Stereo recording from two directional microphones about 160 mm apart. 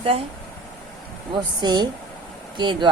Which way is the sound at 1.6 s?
25° right (ahead or behind).